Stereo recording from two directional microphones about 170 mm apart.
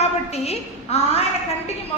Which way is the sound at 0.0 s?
40° left (ahead or behind).